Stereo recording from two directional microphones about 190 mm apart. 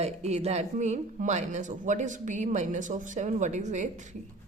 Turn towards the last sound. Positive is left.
turn(degrees=-40)  # may be behind; listen again after turning